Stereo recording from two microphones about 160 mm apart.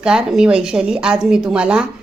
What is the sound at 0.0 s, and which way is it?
A woman's voice, 5° right (ahead or behind).